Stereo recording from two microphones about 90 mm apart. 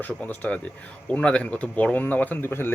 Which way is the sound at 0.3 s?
15° left (ahead or behind).